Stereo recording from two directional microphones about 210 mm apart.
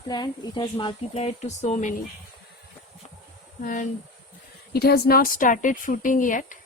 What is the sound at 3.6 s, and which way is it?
Speech, 40° left (ahead or behind).